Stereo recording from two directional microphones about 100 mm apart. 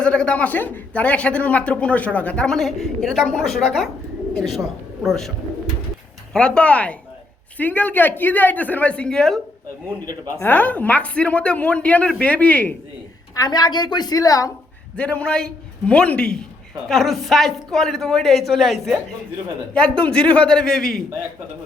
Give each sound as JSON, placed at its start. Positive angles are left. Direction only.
{"t": 0.0, "sound": "a man's voice", "side_deg": 10}
{"t": 6.3, "sound": "a man's voice", "side_deg": 10}
{"t": 10.4, "sound": "a man's voice", "side_deg": 20}
{"t": 13.3, "sound": "a woman's voice", "side_deg": 40}
{"t": 14.9, "sound": "a man's voice", "side_deg": 15}